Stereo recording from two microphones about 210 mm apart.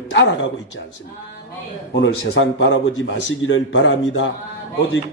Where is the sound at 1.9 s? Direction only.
60° left (ahead or behind).